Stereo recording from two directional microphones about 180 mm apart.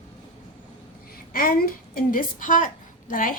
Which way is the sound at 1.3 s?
55° left (ahead or behind).